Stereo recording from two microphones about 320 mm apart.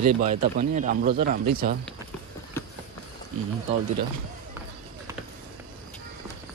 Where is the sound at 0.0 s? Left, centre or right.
Right.